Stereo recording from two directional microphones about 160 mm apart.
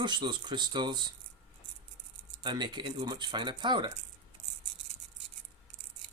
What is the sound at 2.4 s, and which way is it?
Speech, 25° right (ahead or behind).